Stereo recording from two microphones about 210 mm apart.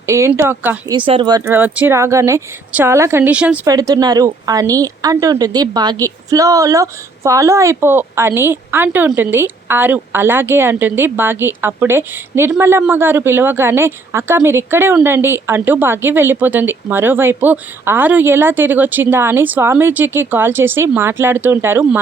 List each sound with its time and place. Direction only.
0.0 s speech: 15° right (ahead or behind)
0.9 s speech: 25° right (ahead or behind)
1.5 s speech: 5° right (ahead or behind)